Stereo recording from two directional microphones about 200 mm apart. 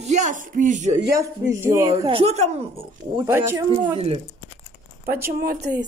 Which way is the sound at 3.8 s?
25° right (ahead or behind).